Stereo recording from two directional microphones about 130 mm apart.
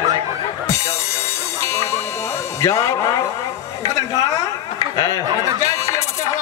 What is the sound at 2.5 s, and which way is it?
Speech, 20° left (ahead or behind).